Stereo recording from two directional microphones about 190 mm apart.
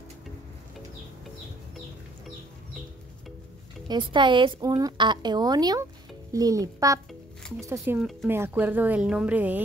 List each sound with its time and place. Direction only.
3.8 s a woman's voice: 25° right (ahead or behind); by 9.6 s 10° right (ahead or behind)